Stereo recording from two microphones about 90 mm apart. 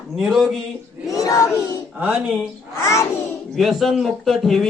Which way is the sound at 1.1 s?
40° left (ahead or behind).